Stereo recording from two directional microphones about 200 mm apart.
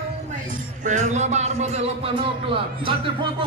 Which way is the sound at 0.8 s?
35° right (ahead or behind).